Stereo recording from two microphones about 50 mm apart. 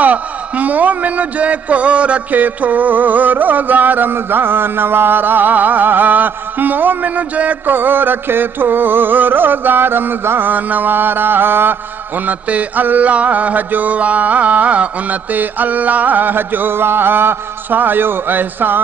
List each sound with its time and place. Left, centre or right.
0.0 s a man's voice: right
12.3 s a man's voice: right